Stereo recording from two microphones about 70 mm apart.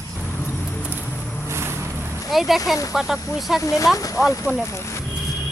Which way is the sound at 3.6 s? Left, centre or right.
Left.